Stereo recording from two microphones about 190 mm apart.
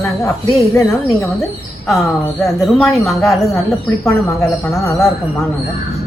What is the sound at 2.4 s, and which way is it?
Speech, centre (ahead or behind).